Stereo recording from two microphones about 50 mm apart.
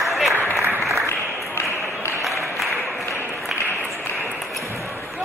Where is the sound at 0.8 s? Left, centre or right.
Right.